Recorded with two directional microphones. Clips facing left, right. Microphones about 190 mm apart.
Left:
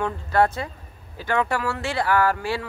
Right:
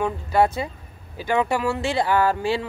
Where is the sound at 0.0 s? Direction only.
15° right (ahead or behind).